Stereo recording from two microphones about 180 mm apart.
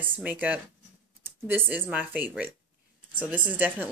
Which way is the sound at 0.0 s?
10° right (ahead or behind).